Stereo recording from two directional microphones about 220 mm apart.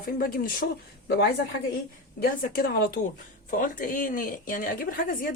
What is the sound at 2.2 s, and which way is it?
Speech, 40° left (ahead or behind).